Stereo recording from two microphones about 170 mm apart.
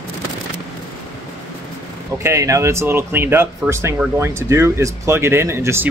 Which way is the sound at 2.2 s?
20° right (ahead or behind).